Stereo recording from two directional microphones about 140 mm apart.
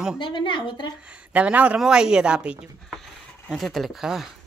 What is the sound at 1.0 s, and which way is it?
A woman's voice, 10° right (ahead or behind).